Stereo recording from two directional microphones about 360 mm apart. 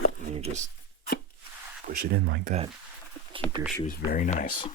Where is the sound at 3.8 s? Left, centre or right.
Left.